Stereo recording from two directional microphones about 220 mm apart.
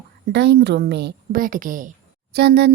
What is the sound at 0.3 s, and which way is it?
Speech, 50° right (ahead or behind).